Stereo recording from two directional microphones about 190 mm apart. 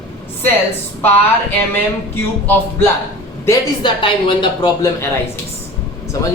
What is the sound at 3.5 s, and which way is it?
Speech, 25° left (ahead or behind).